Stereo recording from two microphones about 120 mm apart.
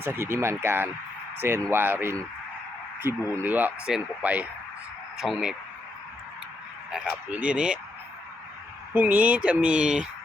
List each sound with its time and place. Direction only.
0.0 s speech: 20° right (ahead or behind); by 5.5 s 5° right (ahead or behind)
6.9 s speech: 10° right (ahead or behind)
9.0 s speech: 15° right (ahead or behind)